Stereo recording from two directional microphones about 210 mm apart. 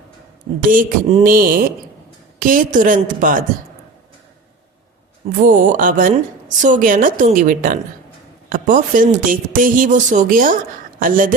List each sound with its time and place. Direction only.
0.7 s a sound: 40° right (ahead or behind)
2.4 s speech: 40° right (ahead or behind)
5.4 s speech: 35° right (ahead or behind)